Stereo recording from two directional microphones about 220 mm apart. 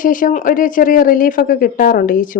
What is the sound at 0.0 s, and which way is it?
Speech, 35° left (ahead or behind).